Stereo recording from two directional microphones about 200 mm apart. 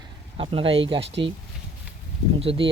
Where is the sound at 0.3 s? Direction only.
25° right (ahead or behind).